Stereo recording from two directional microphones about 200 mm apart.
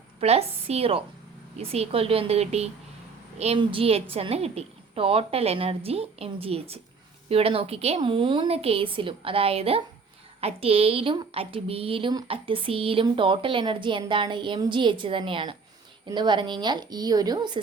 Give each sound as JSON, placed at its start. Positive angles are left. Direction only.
{"t": 0.2, "sound": "a woman's voice", "side_deg": -30}